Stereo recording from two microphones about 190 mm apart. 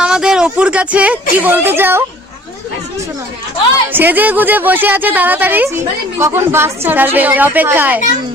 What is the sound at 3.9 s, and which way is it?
A woman's voice, 10° right (ahead or behind).